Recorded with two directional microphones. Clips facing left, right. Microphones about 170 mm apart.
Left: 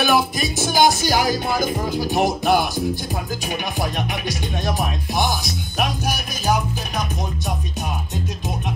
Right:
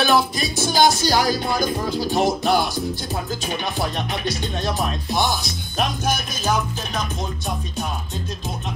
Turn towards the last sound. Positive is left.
turn(degrees=10)  # may be behind; listen again after turning